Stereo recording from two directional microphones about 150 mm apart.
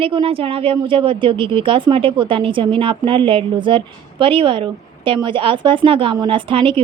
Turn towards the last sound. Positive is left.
turn(degrees=-35)  # may be behind; listen again after turning